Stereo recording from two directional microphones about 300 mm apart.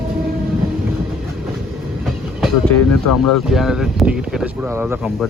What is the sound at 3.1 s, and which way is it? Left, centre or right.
Speech, left.